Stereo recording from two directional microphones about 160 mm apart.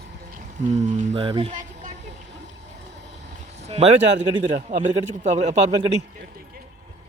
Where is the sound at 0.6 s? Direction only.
45° right (ahead or behind).